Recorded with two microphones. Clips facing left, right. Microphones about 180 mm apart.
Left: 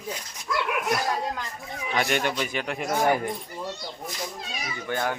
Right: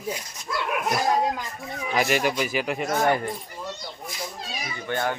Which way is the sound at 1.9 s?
5° right (ahead or behind).